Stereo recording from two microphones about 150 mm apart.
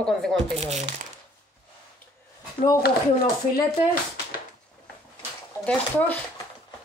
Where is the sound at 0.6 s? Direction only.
50° right (ahead or behind).